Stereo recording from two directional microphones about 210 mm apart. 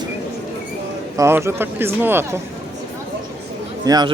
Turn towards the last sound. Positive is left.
turn(degrees=-20)  # may be behind; listen again after turning